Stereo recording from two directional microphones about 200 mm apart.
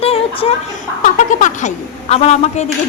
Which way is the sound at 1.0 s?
40° left (ahead or behind).